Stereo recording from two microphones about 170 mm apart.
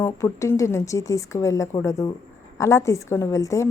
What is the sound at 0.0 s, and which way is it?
A woman's voice, 15° left (ahead or behind).